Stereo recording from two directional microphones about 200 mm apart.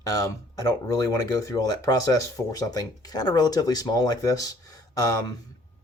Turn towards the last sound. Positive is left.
turn(degrees=20)  # may be behind; listen again after turning